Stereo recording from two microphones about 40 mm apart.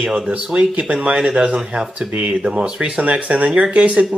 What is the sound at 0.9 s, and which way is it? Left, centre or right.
Speech, right.